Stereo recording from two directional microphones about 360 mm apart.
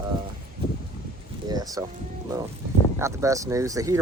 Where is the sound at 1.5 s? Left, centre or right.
Centre.